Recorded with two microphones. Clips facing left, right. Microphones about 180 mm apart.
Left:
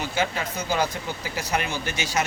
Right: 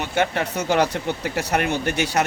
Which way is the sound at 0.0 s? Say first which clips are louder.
Right 4 dB; 65° right (ahead or behind).